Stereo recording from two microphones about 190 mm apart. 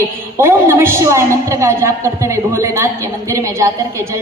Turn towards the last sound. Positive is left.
turn(degrees=-15)  # may be behind; listen again after turning